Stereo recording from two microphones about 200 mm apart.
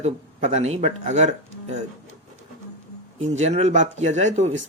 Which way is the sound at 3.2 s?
35° right (ahead or behind).